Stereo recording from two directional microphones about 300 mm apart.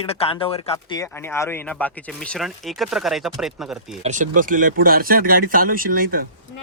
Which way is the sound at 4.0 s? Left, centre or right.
Right.